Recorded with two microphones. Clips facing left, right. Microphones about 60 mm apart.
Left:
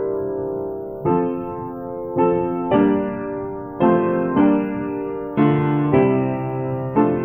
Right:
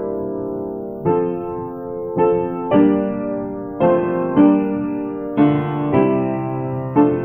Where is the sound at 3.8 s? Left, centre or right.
Centre.